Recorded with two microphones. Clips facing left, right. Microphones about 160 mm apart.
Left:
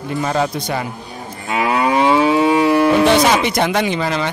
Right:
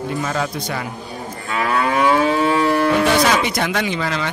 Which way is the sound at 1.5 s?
20° left (ahead or behind).